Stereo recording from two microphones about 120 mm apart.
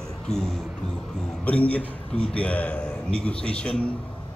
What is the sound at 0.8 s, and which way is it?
A man's voice, 5° left (ahead or behind).